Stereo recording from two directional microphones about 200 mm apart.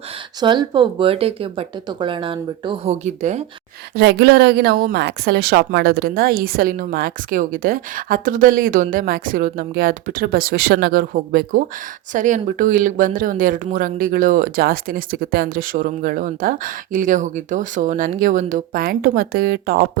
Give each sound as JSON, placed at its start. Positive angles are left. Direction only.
{"t": 0.3, "sound": "speech", "side_deg": -20}
{"t": 3.9, "sound": "speech", "side_deg": -55}